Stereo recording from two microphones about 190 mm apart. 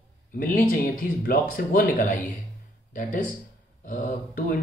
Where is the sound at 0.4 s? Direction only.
45° left (ahead or behind).